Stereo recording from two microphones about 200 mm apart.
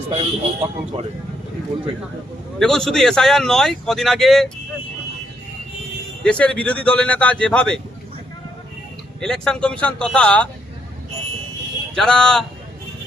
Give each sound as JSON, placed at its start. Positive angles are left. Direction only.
{"t": 0.1, "sound": "speech", "side_deg": -30}
{"t": 2.6, "sound": "speech", "side_deg": 0}
{"t": 6.2, "sound": "speech", "side_deg": 5}
{"t": 9.2, "sound": "speech", "side_deg": 5}
{"t": 11.9, "sound": "speech", "side_deg": 5}